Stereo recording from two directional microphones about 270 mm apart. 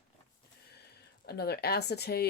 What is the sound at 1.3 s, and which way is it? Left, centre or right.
Speech, left.